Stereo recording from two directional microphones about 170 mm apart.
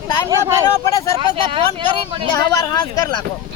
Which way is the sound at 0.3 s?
20° right (ahead or behind).